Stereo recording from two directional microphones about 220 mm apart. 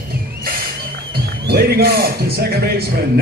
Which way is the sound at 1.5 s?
45° right (ahead or behind).